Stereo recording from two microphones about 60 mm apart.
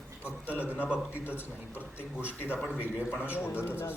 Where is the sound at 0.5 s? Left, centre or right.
Right.